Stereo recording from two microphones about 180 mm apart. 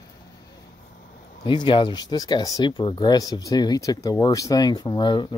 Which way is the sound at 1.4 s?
25° left (ahead or behind).